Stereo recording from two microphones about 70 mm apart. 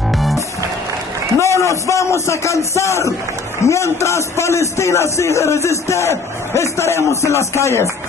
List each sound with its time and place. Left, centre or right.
0.1 s music: centre
1.4 s a man's voice: left